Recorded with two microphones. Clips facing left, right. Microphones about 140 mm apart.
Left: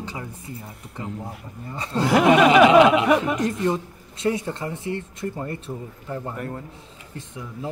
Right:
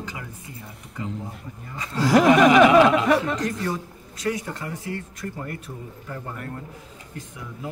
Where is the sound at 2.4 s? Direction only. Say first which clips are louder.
Left 1 dB; 15° left (ahead or behind).